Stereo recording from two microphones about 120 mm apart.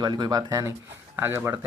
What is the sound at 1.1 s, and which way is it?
Speech, 20° right (ahead or behind).